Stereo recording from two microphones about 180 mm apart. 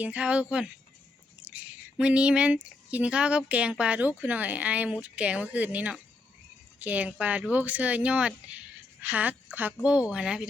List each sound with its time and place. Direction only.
0.0 s speech: 5° right (ahead or behind)